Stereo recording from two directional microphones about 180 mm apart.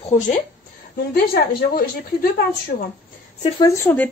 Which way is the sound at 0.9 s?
55° left (ahead or behind).